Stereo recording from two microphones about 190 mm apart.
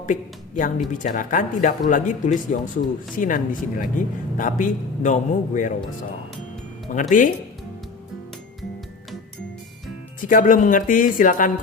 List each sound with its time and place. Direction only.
0.0 s a woman's voice: 45° left (ahead or behind)
6.9 s a woman's voice: 40° left (ahead or behind)
10.2 s a woman's voice: 45° left (ahead or behind)